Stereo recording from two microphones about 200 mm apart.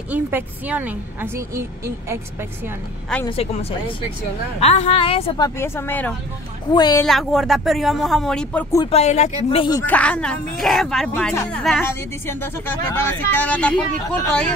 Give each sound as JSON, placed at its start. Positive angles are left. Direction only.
{"t": 0.1, "sound": "a woman's voice", "side_deg": -10}
{"t": 4.6, "sound": "a woman's voice", "side_deg": 30}
{"t": 5.6, "sound": "a woman's voice", "side_deg": 10}
{"t": 7.1, "sound": "speech", "side_deg": 0}
{"t": 8.9, "sound": "speech", "side_deg": 35}
{"t": 9.8, "sound": "speech", "side_deg": 5}